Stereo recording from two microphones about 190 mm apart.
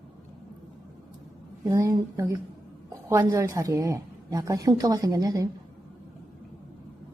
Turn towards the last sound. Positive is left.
turn(degrees=-20)  # may be behind; listen again after turning